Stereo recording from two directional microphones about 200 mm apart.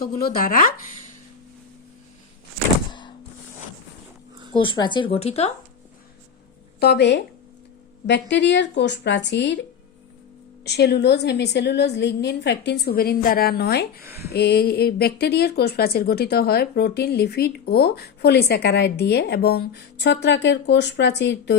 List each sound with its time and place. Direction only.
0.0 s a woman's voice: 50° left (ahead or behind)
4.5 s speech: 25° left (ahead or behind)
6.7 s a woman's voice: 55° left (ahead or behind)
10.6 s a woman's voice: 55° left (ahead or behind)
14.0 s speech: 10° right (ahead or behind)
14.3 s a woman's voice: 55° left (ahead or behind)